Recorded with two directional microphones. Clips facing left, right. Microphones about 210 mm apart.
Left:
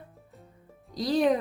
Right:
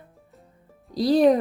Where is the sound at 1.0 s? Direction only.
35° right (ahead or behind).